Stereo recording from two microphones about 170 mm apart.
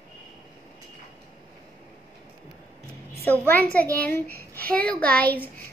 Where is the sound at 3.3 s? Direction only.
10° left (ahead or behind).